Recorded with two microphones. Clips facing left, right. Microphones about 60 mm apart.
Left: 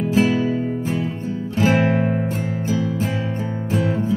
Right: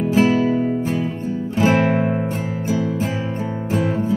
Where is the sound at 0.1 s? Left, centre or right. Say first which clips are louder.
Right 2 dB; centre.